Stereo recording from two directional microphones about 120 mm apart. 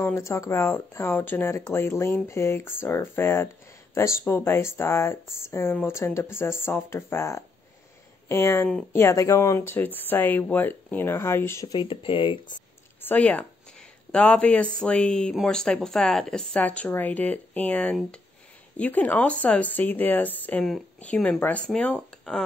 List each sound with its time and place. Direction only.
0.0 s speech: 20° left (ahead or behind)
11.6 s speech: 40° left (ahead or behind)
13.0 s speech: 10° left (ahead or behind)